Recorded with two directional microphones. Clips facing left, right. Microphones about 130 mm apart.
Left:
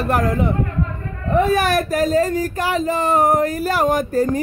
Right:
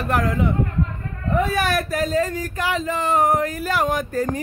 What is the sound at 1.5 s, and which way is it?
Speech, 45° left (ahead or behind).